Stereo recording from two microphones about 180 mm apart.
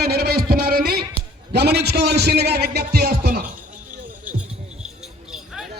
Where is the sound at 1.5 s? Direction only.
65° right (ahead or behind).